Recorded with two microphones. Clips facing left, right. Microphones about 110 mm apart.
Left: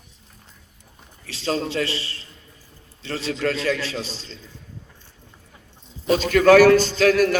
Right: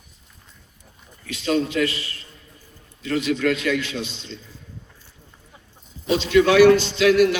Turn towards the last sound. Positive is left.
turn(degrees=40)  # may be behind; listen again after turning